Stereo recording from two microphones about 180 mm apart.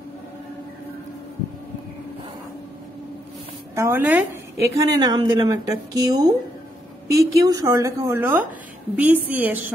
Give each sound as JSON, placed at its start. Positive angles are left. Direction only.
{"t": 3.7, "sound": "a woman's voice", "side_deg": -15}
{"t": 4.8, "sound": "a woman's voice", "side_deg": -20}